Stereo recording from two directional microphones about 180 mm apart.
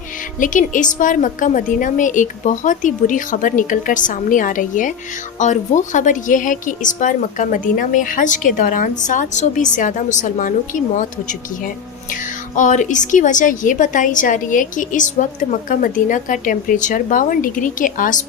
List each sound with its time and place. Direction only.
0.3 s a woman's voice: 45° left (ahead or behind)
12.5 s a woman's voice: 45° left (ahead or behind)